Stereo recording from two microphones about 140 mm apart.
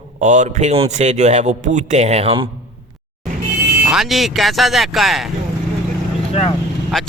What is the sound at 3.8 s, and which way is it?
Speech, 5° right (ahead or behind).